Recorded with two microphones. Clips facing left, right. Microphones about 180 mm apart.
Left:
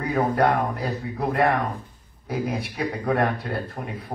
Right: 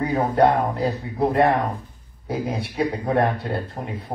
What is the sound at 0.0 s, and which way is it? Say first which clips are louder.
Speech: right 3 dB; 25° right (ahead or behind).